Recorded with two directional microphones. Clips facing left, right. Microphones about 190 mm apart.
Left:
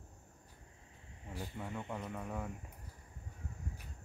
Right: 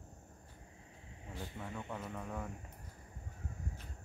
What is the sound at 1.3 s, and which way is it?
Speech, 10° left (ahead or behind).